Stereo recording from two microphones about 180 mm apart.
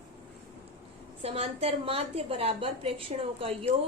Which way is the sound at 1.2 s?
35° right (ahead or behind).